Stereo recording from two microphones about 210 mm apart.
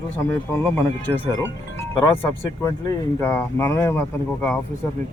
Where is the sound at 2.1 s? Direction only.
10° left (ahead or behind).